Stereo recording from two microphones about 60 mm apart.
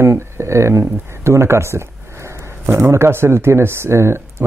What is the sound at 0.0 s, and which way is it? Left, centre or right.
Speech, right.